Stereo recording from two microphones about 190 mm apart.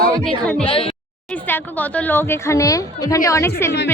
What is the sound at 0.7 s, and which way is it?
Speech, 30° left (ahead or behind).